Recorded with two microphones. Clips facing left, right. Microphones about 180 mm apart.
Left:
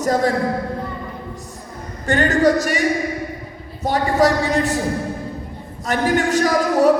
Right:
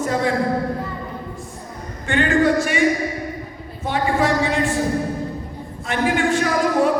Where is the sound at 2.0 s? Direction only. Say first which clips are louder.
Left 2 dB; 40° left (ahead or behind).